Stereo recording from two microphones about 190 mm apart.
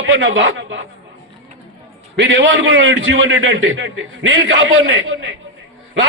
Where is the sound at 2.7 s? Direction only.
90° right.